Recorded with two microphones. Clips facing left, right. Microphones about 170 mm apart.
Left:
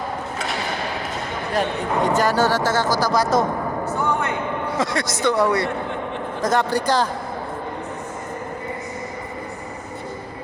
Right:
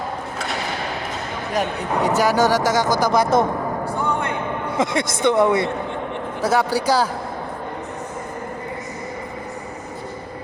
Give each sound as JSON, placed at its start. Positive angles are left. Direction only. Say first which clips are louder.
{"t": 1.5, "sound": "speech", "louder": "even", "side_deg": -10}
{"t": 3.8, "sound": "a sound", "louder": "left 2 dB", "side_deg": -15}
{"t": 4.8, "sound": "a man's voice", "louder": "right 4 dB", "side_deg": -20}
{"t": 6.4, "sound": "speech", "louder": "right 1 dB", "side_deg": -10}